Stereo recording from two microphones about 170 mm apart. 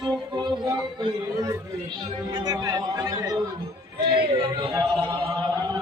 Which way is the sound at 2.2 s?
25° right (ahead or behind).